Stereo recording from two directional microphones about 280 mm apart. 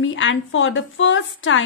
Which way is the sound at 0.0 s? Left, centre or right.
Left.